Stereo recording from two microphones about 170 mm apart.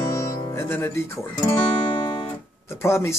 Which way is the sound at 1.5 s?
25° left (ahead or behind).